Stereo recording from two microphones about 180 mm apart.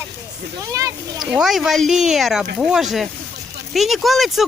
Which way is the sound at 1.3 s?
5° right (ahead or behind).